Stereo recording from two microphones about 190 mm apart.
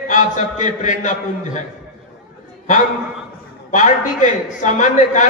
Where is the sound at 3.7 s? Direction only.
40° left (ahead or behind).